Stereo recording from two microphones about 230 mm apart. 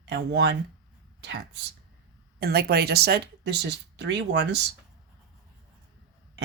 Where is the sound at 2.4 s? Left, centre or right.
Right.